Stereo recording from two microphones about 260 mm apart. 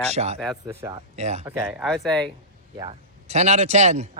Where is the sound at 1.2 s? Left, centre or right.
Right.